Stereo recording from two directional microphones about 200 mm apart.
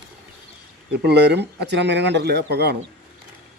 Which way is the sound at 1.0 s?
55° right (ahead or behind).